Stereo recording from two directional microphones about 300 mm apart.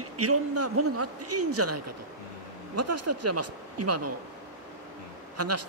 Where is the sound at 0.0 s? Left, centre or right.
Right.